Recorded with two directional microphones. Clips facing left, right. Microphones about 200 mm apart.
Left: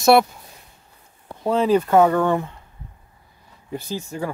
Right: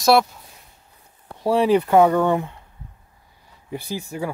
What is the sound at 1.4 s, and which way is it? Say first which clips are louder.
Speech: right 1 dB; 15° right (ahead or behind).